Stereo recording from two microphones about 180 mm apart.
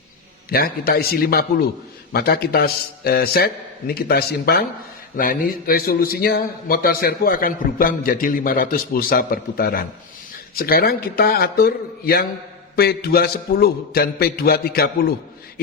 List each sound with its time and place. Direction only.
0.5 s a man's voice: 55° left (ahead or behind)